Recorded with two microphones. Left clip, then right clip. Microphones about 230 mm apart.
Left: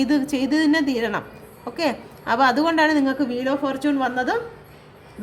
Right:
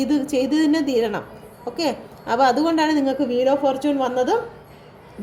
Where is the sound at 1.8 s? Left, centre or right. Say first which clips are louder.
Left 1 dB; left.